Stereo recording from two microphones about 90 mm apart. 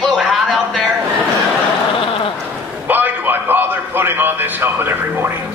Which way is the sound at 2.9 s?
20° right (ahead or behind).